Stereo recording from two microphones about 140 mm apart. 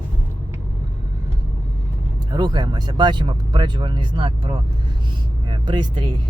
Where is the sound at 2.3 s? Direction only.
30° right (ahead or behind).